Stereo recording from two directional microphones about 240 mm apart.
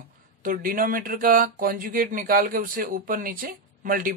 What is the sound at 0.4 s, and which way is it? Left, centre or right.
Speech, right.